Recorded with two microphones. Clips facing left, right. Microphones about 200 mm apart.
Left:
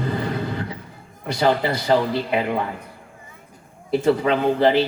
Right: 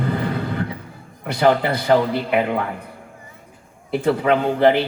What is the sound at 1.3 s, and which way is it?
Speech, 55° right (ahead or behind).